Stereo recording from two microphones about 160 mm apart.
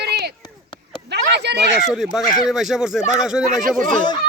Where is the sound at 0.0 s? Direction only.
90° right.